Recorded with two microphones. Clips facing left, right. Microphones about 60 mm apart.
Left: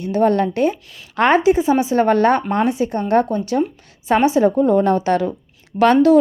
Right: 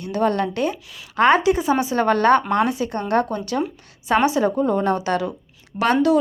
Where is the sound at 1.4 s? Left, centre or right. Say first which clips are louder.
Left 4 dB; left.